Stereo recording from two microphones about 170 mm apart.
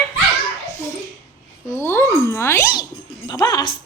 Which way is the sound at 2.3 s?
15° left (ahead or behind).